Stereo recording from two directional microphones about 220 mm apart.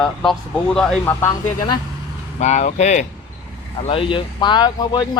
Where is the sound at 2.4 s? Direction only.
30° left (ahead or behind).